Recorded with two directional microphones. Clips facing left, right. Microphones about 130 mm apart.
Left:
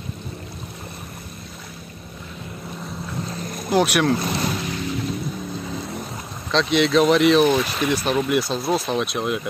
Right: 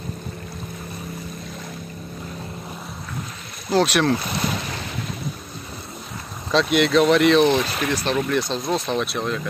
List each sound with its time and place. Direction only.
3.7 s speech: 10° left (ahead or behind)
6.5 s speech: 5° right (ahead or behind)